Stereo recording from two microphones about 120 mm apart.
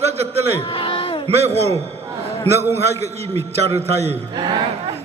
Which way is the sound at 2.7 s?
65° right (ahead or behind).